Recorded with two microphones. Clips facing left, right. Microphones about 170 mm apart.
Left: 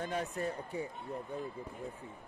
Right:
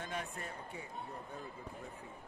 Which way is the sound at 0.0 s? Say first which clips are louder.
Left 7 dB; 35° left (ahead or behind).